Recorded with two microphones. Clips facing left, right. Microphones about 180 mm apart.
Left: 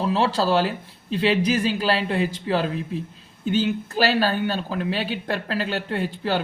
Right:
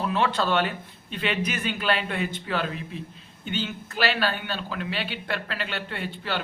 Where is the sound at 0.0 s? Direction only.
30° left (ahead or behind).